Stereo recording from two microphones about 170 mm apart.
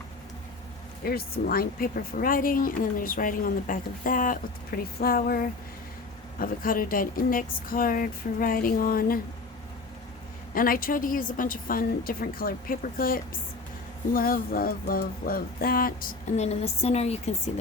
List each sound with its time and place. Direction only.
1.0 s speech: 60° left (ahead or behind)
10.5 s speech: 55° left (ahead or behind)
16.4 s a woman's voice: 40° left (ahead or behind)